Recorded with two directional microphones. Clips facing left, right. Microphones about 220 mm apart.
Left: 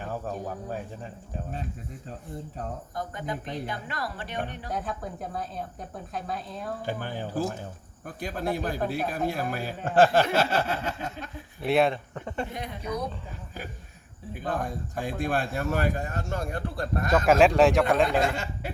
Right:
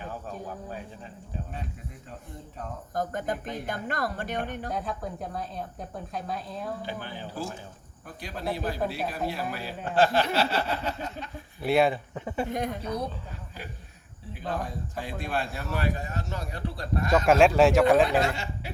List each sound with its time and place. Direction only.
2.9 s speech: 45° right (ahead or behind)
4.7 s speech: centre (ahead or behind)
6.8 s speech: 45° left (ahead or behind)
11.6 s speech: centre (ahead or behind)
14.3 s speech: 50° left (ahead or behind)
17.1 s speech: centre (ahead or behind)
18.2 s speech: 50° left (ahead or behind)